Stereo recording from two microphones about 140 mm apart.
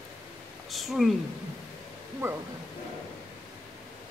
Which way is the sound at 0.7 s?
Centre (ahead or behind).